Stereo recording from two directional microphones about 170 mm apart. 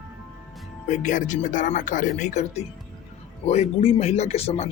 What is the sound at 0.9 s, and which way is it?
Speech, 45° left (ahead or behind).